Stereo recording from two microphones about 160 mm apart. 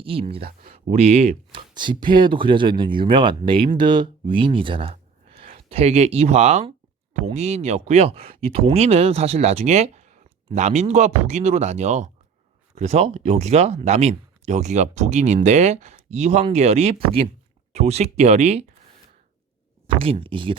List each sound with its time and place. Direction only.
0.0 s speech: 35° right (ahead or behind)
0.4 s speech: 60° right (ahead or behind); by 1.6 s 40° right (ahead or behind)
1.7 s speech: 30° right (ahead or behind)
20.0 s speech: 35° right (ahead or behind)